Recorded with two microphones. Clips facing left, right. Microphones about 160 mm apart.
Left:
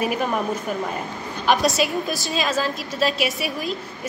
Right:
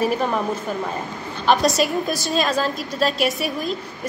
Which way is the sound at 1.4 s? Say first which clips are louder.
Right 2 dB; 5° left (ahead or behind).